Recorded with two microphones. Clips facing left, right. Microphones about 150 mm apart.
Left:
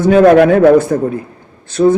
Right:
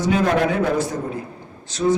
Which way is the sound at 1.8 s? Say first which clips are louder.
Left 9 dB; 80° left.